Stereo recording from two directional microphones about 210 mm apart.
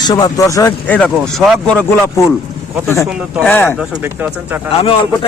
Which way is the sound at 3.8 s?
10° right (ahead or behind).